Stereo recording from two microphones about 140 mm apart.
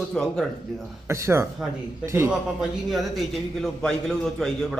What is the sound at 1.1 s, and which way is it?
Speech, 20° right (ahead or behind).